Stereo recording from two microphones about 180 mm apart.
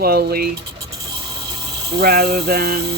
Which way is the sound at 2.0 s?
60° right (ahead or behind).